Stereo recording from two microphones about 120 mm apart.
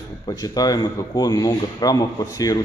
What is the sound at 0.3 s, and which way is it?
Speech, 30° left (ahead or behind).